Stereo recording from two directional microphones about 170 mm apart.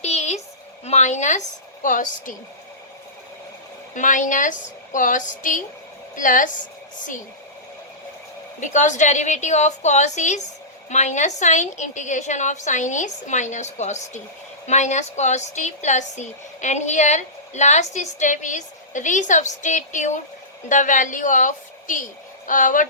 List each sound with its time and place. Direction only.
0.0 s a sound: 40° left (ahead or behind)
0.9 s a woman's voice: 45° left (ahead or behind)
3.9 s a woman's voice: 50° left (ahead or behind)
8.6 s a woman's voice: 45° left (ahead or behind)